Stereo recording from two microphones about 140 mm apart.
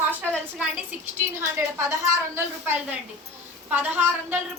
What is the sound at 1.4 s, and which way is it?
A woman's voice, 20° right (ahead or behind).